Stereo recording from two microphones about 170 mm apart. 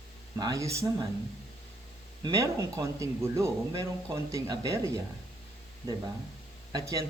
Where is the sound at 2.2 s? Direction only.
20° right (ahead or behind).